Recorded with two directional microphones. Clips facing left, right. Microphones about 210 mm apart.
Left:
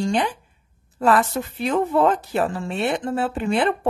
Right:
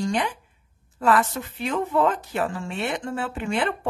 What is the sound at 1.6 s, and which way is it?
Speech, 35° left (ahead or behind).